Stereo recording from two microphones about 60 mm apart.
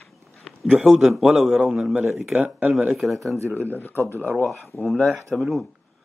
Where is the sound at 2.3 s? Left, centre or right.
Right.